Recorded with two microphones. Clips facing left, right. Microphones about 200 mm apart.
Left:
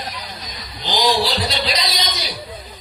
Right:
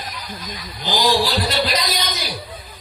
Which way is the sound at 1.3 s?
50° right (ahead or behind).